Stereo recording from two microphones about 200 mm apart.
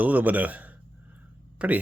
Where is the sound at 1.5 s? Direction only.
5° right (ahead or behind).